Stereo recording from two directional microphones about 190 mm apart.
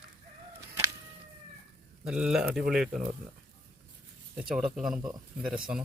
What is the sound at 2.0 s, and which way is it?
Speech, 5° right (ahead or behind).